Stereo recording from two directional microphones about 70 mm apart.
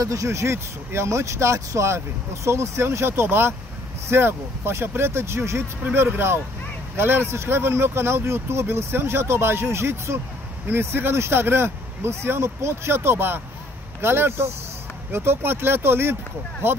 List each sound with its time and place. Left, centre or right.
0.0 s speech: right